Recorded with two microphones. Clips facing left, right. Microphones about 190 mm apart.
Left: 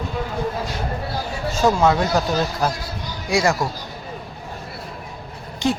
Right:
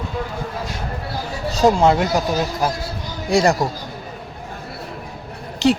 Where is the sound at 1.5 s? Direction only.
30° right (ahead or behind).